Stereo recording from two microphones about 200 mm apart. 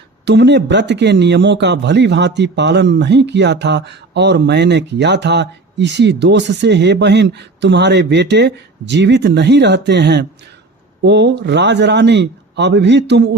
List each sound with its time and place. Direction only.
0.3 s speech: 60° right (ahead or behind)